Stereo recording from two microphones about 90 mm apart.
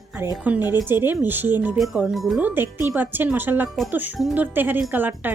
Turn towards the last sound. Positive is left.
turn(degrees=-20)  # may be behind; listen again after turning